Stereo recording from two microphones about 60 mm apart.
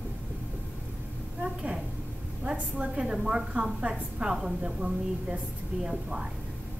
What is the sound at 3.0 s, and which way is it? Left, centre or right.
A woman's voice, centre.